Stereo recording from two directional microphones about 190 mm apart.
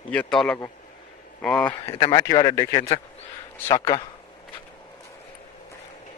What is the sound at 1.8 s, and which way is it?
Speech, 30° left (ahead or behind).